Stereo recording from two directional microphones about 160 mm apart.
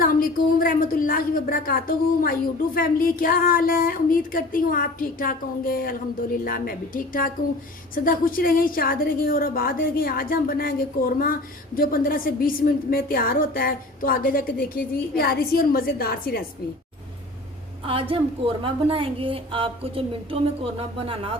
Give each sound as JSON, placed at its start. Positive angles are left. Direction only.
{"t": 0.0, "sound": "a woman's voice", "side_deg": 65}
{"t": 17.8, "sound": "a woman's voice", "side_deg": -35}